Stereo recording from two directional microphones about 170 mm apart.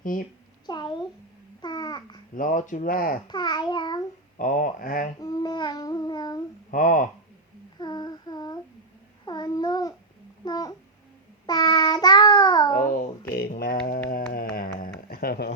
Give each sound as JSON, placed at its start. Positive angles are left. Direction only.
{"t": 0.0, "sound": "a woman's voice", "side_deg": 55}
{"t": 0.7, "sound": "child singing", "side_deg": 25}
{"t": 1.6, "sound": "babbling", "side_deg": 25}
{"t": 2.3, "sound": "speech", "side_deg": 50}
{"t": 3.2, "sound": "child singing", "side_deg": 25}
{"t": 4.4, "sound": "speech", "side_deg": 50}
{"t": 5.2, "sound": "child singing", "side_deg": 25}
{"t": 6.7, "sound": "speech", "side_deg": 50}
{"t": 7.8, "sound": "female singing", "side_deg": 25}
{"t": 9.2, "sound": "a child's voice", "side_deg": 25}
{"t": 10.4, "sound": "child singing", "side_deg": 25}
{"t": 12.7, "sound": "speech", "side_deg": 50}
{"t": 13.6, "sound": "mantra", "side_deg": 55}
{"t": 14.1, "sound": "a sound", "side_deg": 60}